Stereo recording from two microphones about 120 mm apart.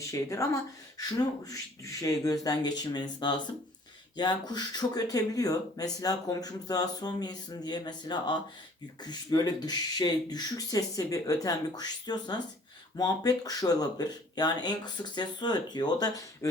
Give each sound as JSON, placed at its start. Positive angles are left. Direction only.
{"t": 0.0, "sound": "speech", "side_deg": 25}